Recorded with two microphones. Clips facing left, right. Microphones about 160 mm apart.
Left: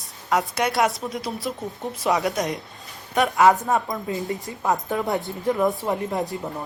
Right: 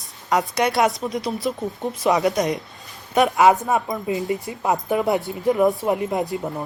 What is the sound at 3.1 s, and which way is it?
Speech, 15° right (ahead or behind).